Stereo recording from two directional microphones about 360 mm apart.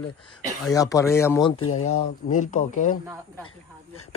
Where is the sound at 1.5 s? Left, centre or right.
Left.